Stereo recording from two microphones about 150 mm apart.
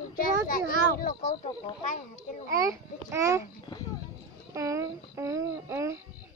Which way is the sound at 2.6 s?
20° right (ahead or behind).